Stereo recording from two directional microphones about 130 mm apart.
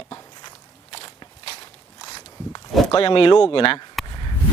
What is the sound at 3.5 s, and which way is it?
Speech, 45° left (ahead or behind).